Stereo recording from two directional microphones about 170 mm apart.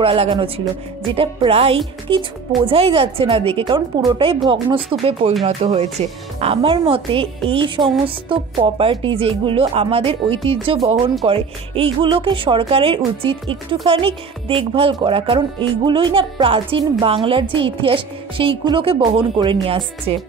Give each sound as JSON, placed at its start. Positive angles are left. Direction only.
{"t": 0.0, "sound": "a woman's voice", "side_deg": -30}